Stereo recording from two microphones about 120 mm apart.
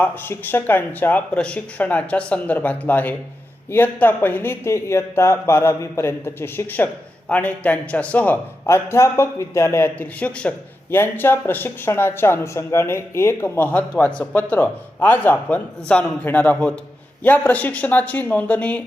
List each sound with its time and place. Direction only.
0.0 s speech: 15° left (ahead or behind)